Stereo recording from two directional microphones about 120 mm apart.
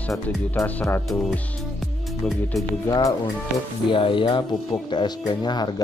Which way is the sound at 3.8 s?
45° left (ahead or behind).